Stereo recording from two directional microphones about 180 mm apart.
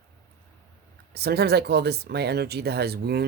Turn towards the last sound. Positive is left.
turn(degrees=-60)  # may be behind; listen again after turning